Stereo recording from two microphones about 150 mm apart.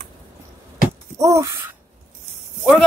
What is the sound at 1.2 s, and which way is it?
Gasp, 20° right (ahead or behind).